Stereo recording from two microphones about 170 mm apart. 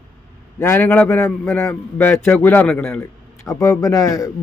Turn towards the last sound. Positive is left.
turn(degrees=20)  # may be behind; listen again after turning